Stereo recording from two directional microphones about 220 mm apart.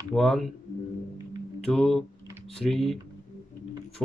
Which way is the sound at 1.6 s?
Centre (ahead or behind).